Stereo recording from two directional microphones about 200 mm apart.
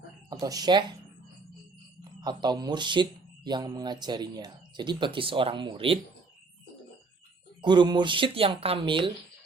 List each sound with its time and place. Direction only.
0.3 s speech: 15° right (ahead or behind)
2.2 s speech: 20° right (ahead or behind)
7.6 s speech: 20° right (ahead or behind)